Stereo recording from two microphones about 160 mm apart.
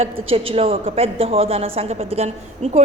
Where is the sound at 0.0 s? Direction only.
35° right (ahead or behind).